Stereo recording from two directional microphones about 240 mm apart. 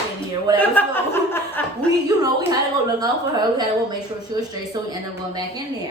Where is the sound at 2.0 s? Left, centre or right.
Centre.